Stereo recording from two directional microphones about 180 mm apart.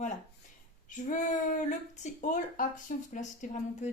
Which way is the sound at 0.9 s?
45° left (ahead or behind).